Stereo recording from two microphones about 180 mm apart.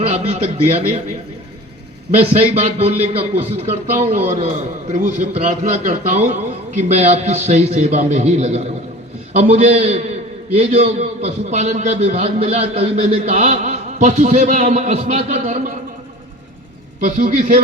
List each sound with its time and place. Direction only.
0.7 s a man's voice: 35° right (ahead or behind)
2.1 s a man's voice: 35° right (ahead or behind)
17.0 s a man's voice: 45° right (ahead or behind)